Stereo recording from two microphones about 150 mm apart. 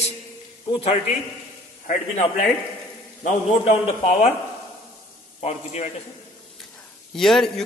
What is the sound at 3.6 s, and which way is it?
Speech, 45° left (ahead or behind).